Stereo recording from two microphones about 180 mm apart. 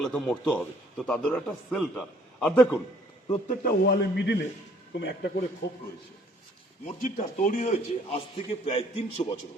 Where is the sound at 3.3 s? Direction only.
50° left (ahead or behind); by 4.3 s 65° left (ahead or behind).